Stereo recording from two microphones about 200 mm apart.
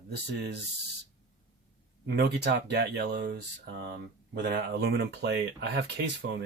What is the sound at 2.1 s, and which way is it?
Speech, 55° right (ahead or behind).